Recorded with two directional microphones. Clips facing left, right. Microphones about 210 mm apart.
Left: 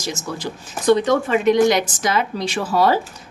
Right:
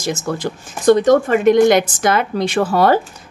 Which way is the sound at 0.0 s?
55° right (ahead or behind).